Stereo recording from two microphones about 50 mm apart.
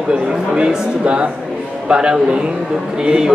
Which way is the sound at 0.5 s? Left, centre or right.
Right.